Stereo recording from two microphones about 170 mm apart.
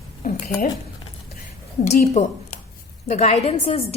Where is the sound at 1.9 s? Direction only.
45° left (ahead or behind).